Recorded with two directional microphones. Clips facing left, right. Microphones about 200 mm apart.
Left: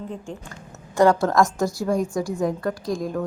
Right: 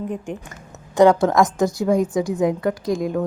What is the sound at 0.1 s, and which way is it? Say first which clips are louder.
A woman's voice: right 5 dB; 20° right (ahead or behind).